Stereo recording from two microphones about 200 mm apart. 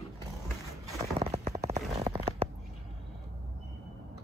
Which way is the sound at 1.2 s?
35° right (ahead or behind).